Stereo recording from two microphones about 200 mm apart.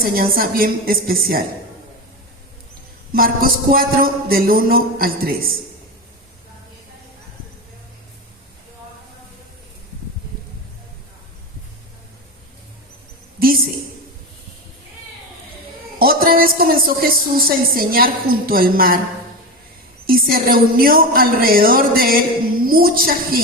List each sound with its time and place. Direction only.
0.0 s speech: 45° right (ahead or behind)
3.1 s speech: 45° right (ahead or behind)
16.0 s a woman's voice: 50° right (ahead or behind)
20.1 s speech: 45° right (ahead or behind)